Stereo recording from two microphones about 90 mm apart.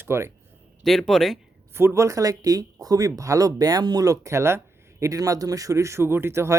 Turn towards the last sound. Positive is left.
turn(degrees=-30)  # may be behind; listen again after turning